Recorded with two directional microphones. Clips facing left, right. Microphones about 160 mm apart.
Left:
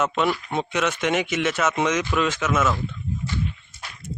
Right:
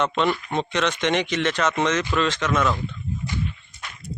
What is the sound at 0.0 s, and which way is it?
Speech, 5° left (ahead or behind).